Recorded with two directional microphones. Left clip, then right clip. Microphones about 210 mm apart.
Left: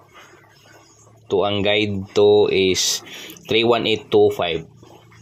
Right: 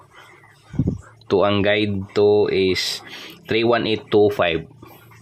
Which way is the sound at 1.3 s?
30° right (ahead or behind).